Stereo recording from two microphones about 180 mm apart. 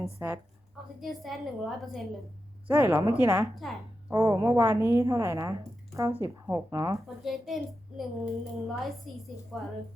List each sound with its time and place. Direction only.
0.2 s a woman's voice: 15° right (ahead or behind)
1.0 s a child's voice: centre (ahead or behind); by 3.5 s 15° right (ahead or behind)
3.5 s a child's voice: centre (ahead or behind)
4.1 s a woman's voice: 15° right (ahead or behind)
7.2 s a child's voice: centre (ahead or behind)